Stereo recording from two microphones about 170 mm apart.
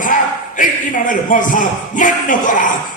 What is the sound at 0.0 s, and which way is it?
A man's voice, 50° left (ahead or behind).